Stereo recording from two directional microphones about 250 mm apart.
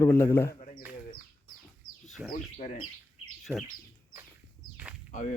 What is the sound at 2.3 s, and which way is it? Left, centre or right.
Speech, left.